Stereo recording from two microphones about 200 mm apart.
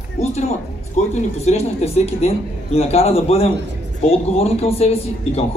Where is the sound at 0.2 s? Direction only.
35° left (ahead or behind).